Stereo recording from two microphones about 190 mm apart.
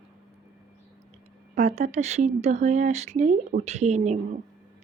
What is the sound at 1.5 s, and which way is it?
Speech, 35° right (ahead or behind).